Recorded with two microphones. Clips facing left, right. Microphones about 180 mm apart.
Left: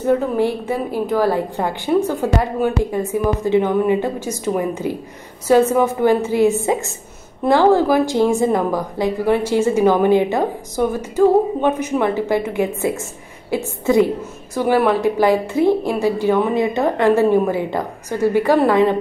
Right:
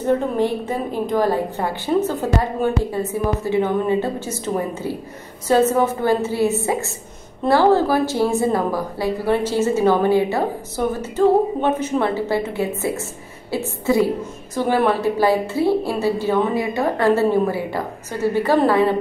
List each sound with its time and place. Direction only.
0.4 s a woman's voice: 10° left (ahead or behind)